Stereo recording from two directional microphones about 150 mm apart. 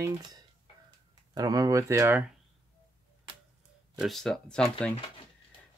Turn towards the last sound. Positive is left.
turn(degrees=5)  # may be behind; listen again after turning